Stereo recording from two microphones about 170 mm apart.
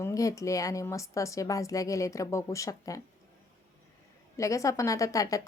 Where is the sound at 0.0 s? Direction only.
20° left (ahead or behind).